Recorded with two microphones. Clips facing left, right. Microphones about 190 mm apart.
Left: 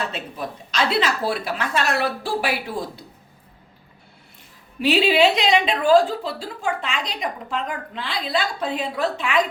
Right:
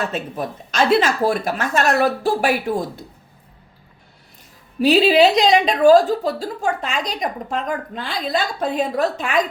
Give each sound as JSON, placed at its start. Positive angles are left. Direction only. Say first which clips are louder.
{"t": 0.1, "sound": "a woman's voice", "louder": "right 5 dB", "side_deg": -45}
{"t": 4.8, "sound": "a woman's voice", "louder": "right 4 dB", "side_deg": -40}